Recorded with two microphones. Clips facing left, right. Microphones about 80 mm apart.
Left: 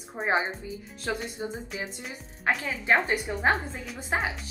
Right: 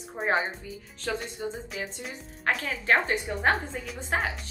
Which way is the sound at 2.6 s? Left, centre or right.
Centre.